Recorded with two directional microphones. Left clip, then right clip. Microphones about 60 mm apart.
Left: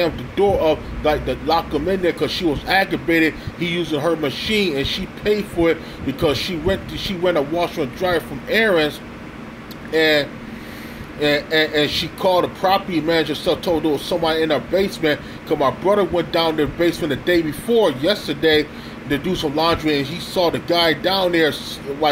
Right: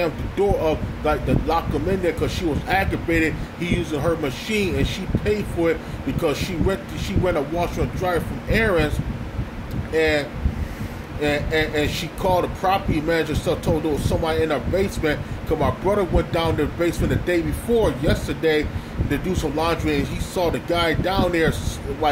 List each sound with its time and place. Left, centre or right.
0.0 s speech: right
9.9 s speech: centre